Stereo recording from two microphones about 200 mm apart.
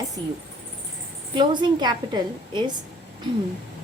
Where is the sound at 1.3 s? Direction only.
25° right (ahead or behind).